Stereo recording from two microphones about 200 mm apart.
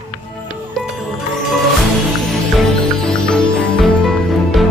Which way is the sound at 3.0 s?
5° left (ahead or behind).